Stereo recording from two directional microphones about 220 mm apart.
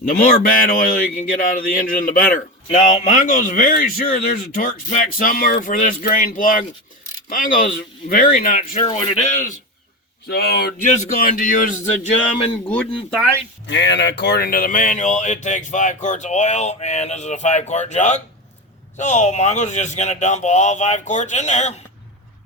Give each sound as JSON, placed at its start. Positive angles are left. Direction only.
{"t": 0.1, "sound": "a man's voice", "side_deg": 40}
{"t": 10.2, "sound": "a man's voice", "side_deg": 45}
{"t": 12.6, "sound": "speech", "side_deg": 5}
{"t": 13.7, "sound": "a man's voice", "side_deg": 55}